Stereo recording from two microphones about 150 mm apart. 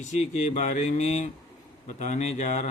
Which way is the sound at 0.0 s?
50° left (ahead or behind).